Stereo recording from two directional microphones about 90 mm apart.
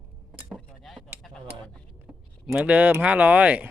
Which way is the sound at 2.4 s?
5° right (ahead or behind).